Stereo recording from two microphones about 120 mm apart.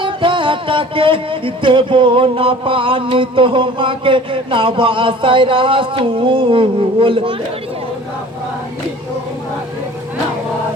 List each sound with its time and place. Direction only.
0.0 s music: 45° right (ahead or behind)